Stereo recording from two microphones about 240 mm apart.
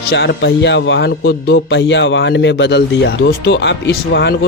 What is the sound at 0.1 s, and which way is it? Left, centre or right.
A man's voice, left.